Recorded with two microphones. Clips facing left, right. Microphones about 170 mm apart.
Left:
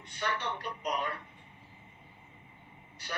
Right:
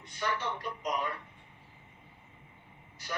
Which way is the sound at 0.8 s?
20° right (ahead or behind).